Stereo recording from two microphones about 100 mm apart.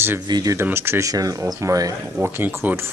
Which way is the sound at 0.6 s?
25° right (ahead or behind).